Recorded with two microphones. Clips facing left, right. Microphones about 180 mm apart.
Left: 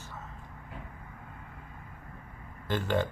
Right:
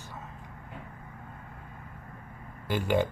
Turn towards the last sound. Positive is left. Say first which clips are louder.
# right 2 dB
turn(degrees=-10)  # may be behind; listen again after turning